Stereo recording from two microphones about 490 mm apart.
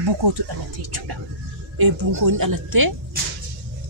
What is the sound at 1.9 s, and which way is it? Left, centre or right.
Speech, right.